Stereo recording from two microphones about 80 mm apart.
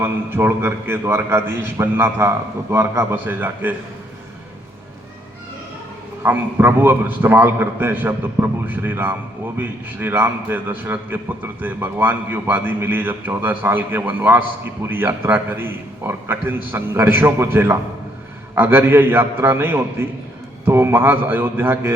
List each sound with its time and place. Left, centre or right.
0.0 s a man's voice: right
6.2 s a man's voice: right